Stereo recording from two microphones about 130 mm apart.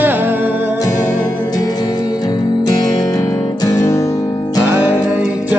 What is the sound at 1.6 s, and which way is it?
Music, 30° left (ahead or behind).